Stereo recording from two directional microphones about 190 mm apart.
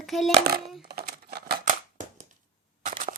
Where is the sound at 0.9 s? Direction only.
55° right (ahead or behind).